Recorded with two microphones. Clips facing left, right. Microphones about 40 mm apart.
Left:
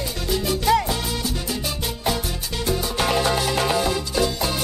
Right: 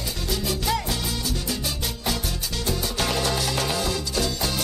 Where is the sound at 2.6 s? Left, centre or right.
Centre.